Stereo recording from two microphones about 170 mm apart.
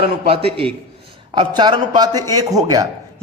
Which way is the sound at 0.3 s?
35° right (ahead or behind).